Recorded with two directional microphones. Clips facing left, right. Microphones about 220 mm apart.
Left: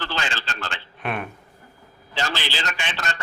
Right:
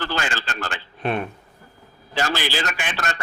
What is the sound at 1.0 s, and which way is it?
Speech, 30° right (ahead or behind).